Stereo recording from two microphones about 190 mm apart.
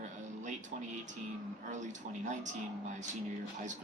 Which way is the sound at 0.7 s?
45° right (ahead or behind).